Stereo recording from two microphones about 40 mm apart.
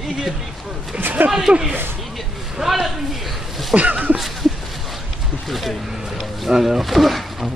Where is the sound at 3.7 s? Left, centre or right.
Right.